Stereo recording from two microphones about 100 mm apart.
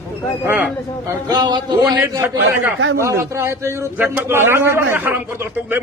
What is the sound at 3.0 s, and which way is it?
A man's voice, 30° right (ahead or behind).